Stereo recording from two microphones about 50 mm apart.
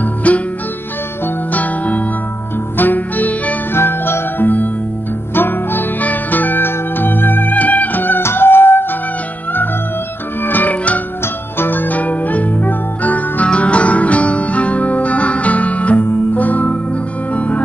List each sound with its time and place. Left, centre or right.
0.0 s music: left
1.5 s music: left
3.7 s music: left
8.2 s music: left
10.4 s music: left